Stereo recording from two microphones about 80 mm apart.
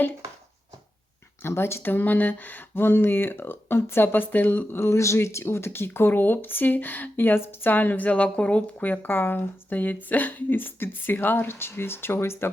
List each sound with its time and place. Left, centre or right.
1.4 s speech: left
4.8 s speech: left